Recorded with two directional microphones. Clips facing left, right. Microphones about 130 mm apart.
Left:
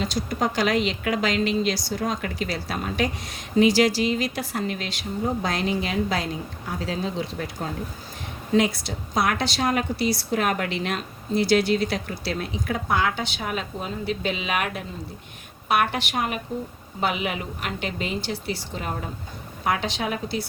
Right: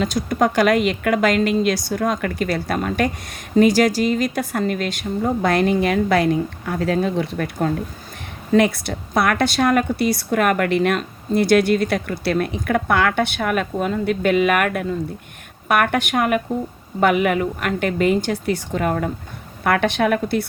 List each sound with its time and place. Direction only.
0.0 s a woman's voice: 50° right (ahead or behind)